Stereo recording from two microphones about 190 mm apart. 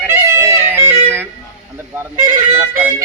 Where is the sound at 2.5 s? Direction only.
10° right (ahead or behind).